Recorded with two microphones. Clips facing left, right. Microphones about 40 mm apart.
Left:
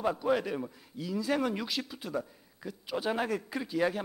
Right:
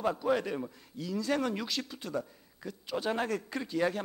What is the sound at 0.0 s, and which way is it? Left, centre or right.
A man's voice, centre.